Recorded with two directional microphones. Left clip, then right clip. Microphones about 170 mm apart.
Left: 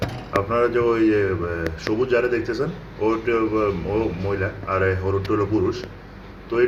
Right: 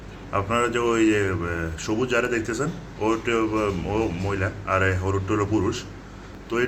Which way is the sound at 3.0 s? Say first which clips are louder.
Left 2 dB; 10° right (ahead or behind).